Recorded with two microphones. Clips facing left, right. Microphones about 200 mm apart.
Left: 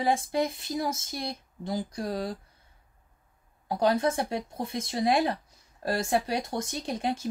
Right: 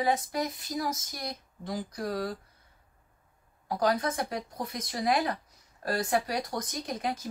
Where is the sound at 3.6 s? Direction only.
25° left (ahead or behind).